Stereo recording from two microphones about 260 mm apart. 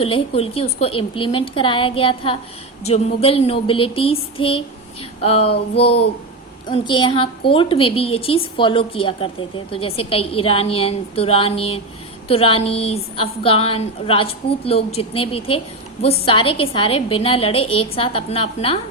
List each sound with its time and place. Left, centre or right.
0.0 s a woman's voice: left